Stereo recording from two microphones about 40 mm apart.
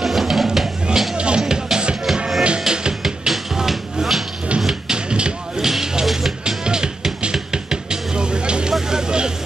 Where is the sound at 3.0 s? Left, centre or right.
Centre.